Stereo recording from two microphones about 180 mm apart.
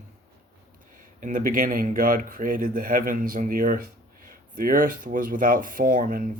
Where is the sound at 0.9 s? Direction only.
50° right (ahead or behind).